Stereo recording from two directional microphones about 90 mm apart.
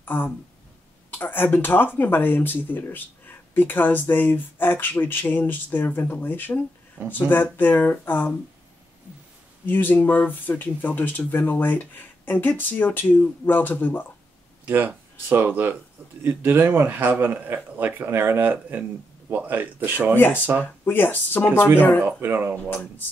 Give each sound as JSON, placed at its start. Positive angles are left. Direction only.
{"t": 0.0, "sound": "speech", "side_deg": 20}
{"t": 9.7, "sound": "speech", "side_deg": 20}
{"t": 14.7, "sound": "a man's voice", "side_deg": -20}
{"t": 20.2, "sound": "speech", "side_deg": 20}
{"t": 22.0, "sound": "a man's voice", "side_deg": -25}
{"t": 22.7, "sound": "speech", "side_deg": 20}